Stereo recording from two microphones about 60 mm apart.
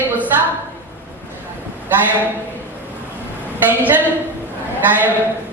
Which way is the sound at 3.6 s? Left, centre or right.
Right.